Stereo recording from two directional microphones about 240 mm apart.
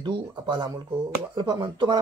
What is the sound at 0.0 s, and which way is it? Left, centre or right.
Speech, centre.